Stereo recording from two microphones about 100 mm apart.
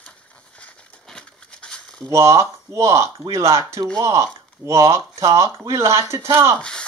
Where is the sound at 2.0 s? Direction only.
30° right (ahead or behind).